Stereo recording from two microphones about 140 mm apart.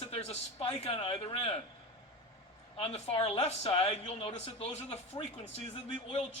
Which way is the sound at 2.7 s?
45° left (ahead or behind).